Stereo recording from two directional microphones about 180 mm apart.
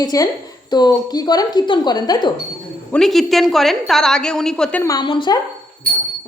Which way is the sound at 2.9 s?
5° left (ahead or behind).